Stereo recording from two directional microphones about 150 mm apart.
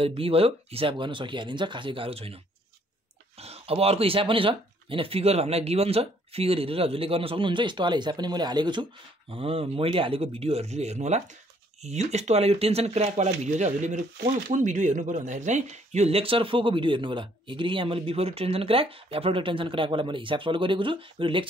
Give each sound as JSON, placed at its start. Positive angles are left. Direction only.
{"t": 0.0, "sound": "speech", "side_deg": -40}